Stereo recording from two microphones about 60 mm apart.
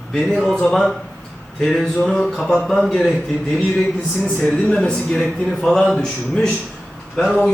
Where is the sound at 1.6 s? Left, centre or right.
Centre.